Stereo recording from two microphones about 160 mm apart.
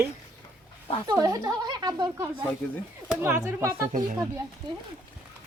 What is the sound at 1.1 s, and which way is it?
Speech, 25° right (ahead or behind).